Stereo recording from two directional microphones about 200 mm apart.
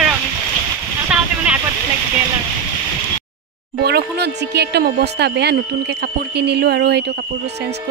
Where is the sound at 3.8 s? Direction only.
55° right (ahead or behind).